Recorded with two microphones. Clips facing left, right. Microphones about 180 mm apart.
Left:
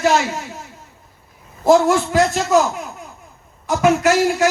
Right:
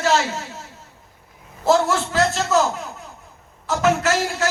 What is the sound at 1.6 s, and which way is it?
Speech, 15° left (ahead or behind).